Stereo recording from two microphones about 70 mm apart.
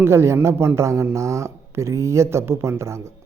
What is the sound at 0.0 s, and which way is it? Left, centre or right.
Speech, right.